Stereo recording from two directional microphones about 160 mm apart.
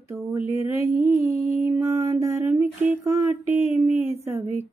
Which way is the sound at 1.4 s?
20° right (ahead or behind).